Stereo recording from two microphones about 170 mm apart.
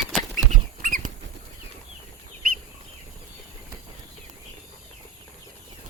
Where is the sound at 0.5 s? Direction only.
50° right (ahead or behind).